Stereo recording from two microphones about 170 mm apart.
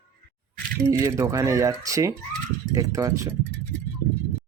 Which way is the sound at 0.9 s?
15° right (ahead or behind).